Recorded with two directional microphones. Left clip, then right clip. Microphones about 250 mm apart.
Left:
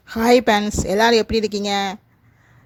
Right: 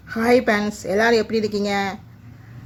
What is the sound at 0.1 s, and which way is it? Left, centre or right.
A woman's voice, left.